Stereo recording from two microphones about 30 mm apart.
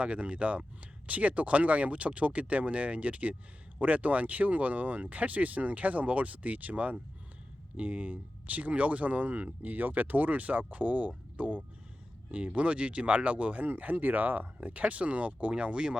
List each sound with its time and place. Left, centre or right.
0.0 s speech: right
12.3 s speech: right
13.7 s speech: right
14.6 s speech: right